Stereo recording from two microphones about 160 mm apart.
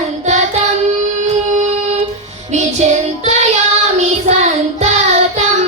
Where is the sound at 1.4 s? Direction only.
45° right (ahead or behind).